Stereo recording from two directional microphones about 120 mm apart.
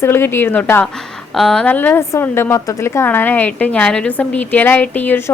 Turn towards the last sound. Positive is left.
turn(degrees=15)  # may be behind; listen again after turning